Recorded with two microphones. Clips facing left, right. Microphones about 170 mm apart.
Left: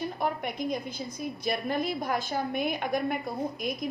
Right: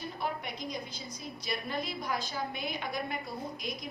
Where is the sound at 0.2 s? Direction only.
55° left (ahead or behind).